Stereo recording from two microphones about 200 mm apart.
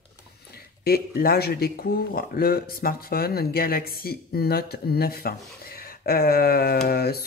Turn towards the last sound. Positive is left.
turn(degrees=50)  # may be behind; listen again after turning